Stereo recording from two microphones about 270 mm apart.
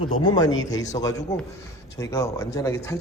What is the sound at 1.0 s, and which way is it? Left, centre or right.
A man's voice, centre.